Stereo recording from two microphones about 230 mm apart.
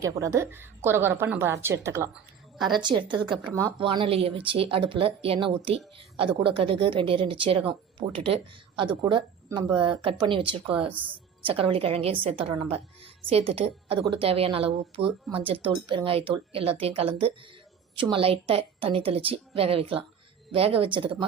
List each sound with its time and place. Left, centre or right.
0.0 s a woman's voice: centre
10.8 s a woman's voice: centre
11.4 s speech: right